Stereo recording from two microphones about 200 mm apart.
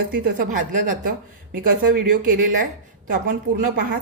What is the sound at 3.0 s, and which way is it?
Speech, 40° right (ahead or behind).